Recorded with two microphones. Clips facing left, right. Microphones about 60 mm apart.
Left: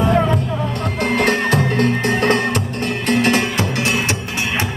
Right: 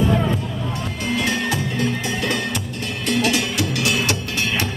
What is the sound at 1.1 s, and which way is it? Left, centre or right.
Music, left.